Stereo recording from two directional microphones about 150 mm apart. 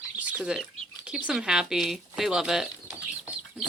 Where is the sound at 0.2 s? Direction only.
10° right (ahead or behind).